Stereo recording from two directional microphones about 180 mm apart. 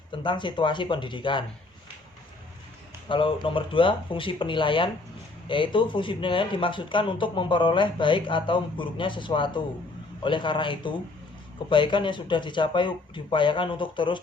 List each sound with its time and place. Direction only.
0.2 s speech: 25° left (ahead or behind)
3.1 s speech: 30° left (ahead or behind)